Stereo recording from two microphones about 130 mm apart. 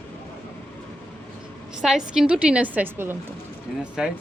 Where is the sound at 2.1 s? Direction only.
5° right (ahead or behind).